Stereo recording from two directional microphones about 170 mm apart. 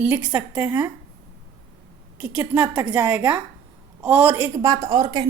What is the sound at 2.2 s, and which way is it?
A woman's voice, 10° right (ahead or behind).